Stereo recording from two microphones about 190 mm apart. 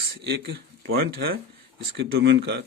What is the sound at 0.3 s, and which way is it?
Speech, 60° right (ahead or behind).